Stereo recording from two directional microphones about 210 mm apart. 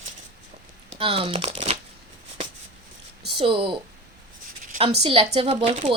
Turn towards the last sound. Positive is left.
turn(degrees=-25)  # may be behind; listen again after turning